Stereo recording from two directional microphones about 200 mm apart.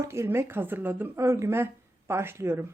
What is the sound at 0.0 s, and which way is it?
A woman's voice, 15° right (ahead or behind).